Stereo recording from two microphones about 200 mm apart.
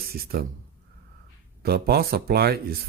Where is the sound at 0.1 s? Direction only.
50° right (ahead or behind).